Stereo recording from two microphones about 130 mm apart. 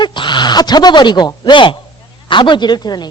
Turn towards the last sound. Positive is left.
turn(degrees=35)  # may be behind; listen again after turning